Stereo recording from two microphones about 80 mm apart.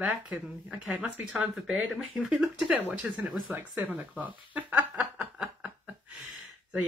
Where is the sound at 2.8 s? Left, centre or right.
Right.